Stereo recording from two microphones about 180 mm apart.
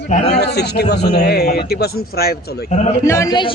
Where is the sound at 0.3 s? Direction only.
65° left (ahead or behind).